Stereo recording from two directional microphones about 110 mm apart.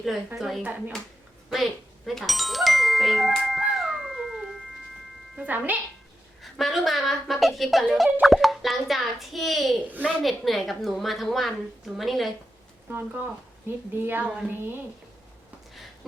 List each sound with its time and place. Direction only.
0.3 s a woman's voice: centre (ahead or behind)
0.6 s a woman's voice: 15° right (ahead or behind)
1.5 s music: centre (ahead or behind)
5.4 s a woman's voice: 15° right (ahead or behind)
6.4 s a woman's voice: centre (ahead or behind)
12.9 s a woman's voice: 15° right (ahead or behind)
14.3 s a woman's voice: 5° right (ahead or behind)